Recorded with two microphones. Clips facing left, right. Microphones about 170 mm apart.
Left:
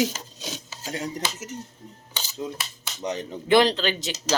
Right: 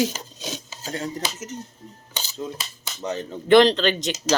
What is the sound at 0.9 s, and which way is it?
Speech, 15° left (ahead or behind).